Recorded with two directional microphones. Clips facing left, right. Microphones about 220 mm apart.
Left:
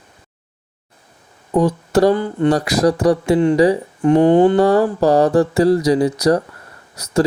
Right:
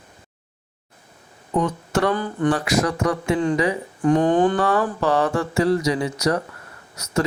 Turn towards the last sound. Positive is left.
turn(degrees=35)  # may be behind; listen again after turning